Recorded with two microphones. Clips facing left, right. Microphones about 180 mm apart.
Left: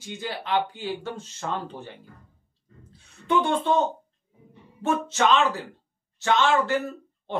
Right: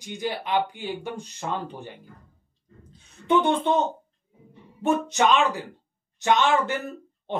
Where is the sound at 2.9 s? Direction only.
20° right (ahead or behind).